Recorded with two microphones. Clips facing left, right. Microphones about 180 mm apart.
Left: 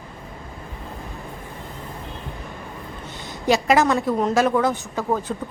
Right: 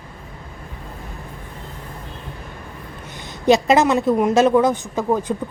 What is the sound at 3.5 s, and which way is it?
Speech, 20° right (ahead or behind).